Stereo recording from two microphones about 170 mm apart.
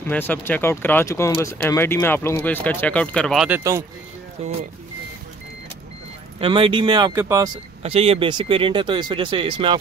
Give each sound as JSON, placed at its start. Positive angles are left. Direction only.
{"t": 0.1, "sound": "speech", "side_deg": 10}
{"t": 3.4, "sound": "speech", "side_deg": -15}
{"t": 4.4, "sound": "speech", "side_deg": -40}
{"t": 6.4, "sound": "speech", "side_deg": -30}
{"t": 7.8, "sound": "speech", "side_deg": -35}